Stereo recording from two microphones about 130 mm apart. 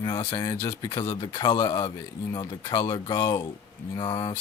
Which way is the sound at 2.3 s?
30° left (ahead or behind).